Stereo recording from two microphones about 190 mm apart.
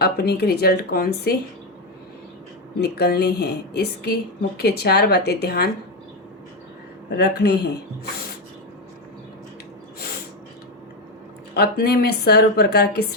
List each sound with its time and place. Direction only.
0.0 s a woman's voice: 60° left (ahead or behind)
2.8 s a woman's voice: 60° left (ahead or behind)
7.2 s a woman's voice: 60° left (ahead or behind)
11.5 s a woman's voice: 60° left (ahead or behind)